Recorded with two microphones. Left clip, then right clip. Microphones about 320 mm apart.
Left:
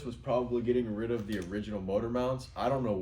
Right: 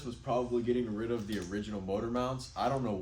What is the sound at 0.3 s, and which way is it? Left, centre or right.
Speech, centre.